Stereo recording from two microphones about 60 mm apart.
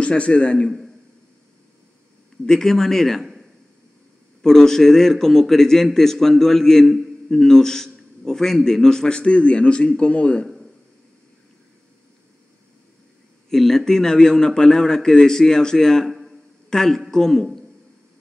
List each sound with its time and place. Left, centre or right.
0.0 s a man's voice: centre
2.4 s a man's voice: centre
10.4 s a sound: centre
13.5 s a man's voice: centre